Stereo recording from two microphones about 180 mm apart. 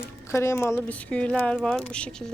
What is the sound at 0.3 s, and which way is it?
Speech, 15° left (ahead or behind).